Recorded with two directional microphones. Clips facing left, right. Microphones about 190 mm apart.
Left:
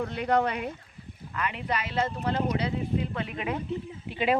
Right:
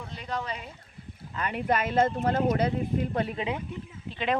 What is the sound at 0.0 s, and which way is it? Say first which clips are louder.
Speech: left 9 dB; 60° left (ahead or behind).